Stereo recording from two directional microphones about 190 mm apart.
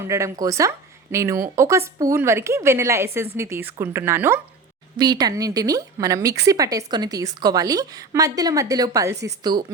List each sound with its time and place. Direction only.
0.0 s speech: 15° right (ahead or behind)